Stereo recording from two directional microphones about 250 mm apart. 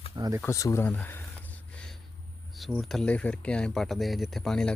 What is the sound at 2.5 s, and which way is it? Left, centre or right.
Speech, centre.